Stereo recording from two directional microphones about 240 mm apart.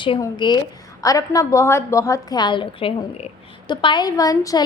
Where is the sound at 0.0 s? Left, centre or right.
Centre.